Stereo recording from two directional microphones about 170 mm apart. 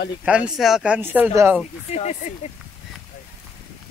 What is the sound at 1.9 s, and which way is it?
Speech, 40° left (ahead or behind).